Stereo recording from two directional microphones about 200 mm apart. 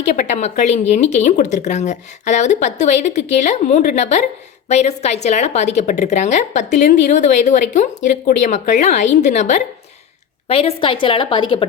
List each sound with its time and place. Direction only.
0.2 s a woman's voice: 35° left (ahead or behind)